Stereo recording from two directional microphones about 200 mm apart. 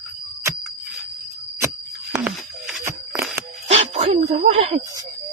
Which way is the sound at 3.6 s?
35° right (ahead or behind).